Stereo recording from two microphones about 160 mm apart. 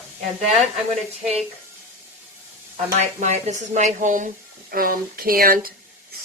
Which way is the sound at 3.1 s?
45° right (ahead or behind).